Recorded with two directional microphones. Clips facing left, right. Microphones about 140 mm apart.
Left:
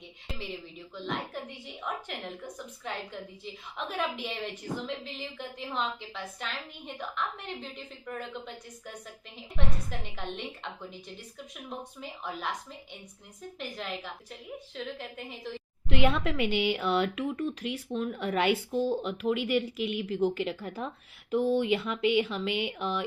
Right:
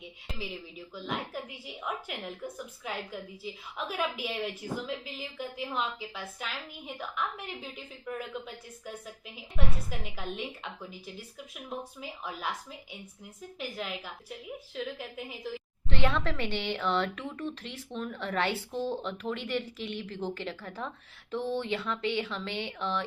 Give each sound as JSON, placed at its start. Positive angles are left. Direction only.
{"t": 0.9, "sound": "a woman's voice", "side_deg": -5}
{"t": 15.9, "sound": "speech", "side_deg": 10}